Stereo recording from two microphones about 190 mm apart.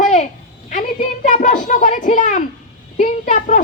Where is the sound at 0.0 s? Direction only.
40° left (ahead or behind).